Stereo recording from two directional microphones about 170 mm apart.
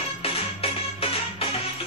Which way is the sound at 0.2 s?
35° left (ahead or behind).